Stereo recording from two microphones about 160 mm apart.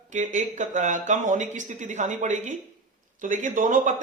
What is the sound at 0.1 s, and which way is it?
A man's voice, 50° right (ahead or behind).